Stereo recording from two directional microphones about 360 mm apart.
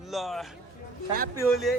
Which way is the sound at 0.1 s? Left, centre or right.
Centre.